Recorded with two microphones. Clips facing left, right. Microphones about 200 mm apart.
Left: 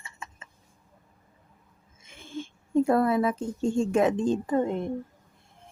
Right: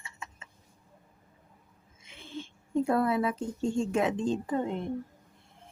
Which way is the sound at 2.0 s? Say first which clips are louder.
Left 4 dB; 45° left (ahead or behind).